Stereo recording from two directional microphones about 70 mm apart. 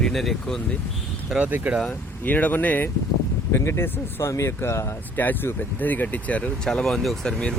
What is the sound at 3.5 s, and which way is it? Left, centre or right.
Speech, left.